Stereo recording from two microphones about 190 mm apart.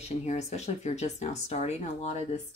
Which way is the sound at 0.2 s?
35° left (ahead or behind).